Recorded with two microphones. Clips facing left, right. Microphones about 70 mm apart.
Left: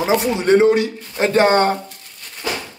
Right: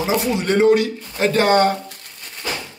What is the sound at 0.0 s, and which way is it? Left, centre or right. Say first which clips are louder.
Speech: left 3 dB; left.